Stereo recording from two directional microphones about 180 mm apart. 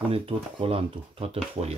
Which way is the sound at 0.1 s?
30° right (ahead or behind).